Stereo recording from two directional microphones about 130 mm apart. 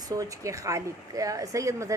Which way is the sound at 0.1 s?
25° right (ahead or behind).